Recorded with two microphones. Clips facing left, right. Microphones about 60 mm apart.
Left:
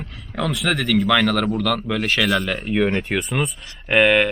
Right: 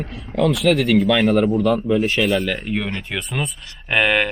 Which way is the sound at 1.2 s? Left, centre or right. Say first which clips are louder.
Right 4 dB; left.